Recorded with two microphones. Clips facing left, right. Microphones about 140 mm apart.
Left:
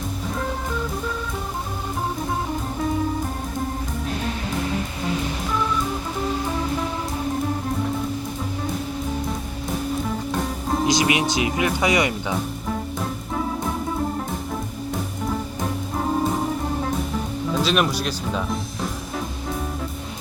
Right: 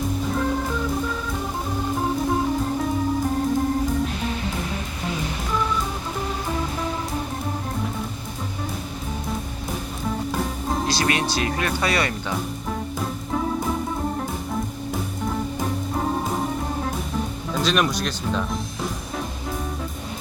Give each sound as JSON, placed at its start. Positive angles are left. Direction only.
{"t": 10.8, "sound": "speech", "side_deg": 15}
{"t": 17.5, "sound": "speech", "side_deg": 5}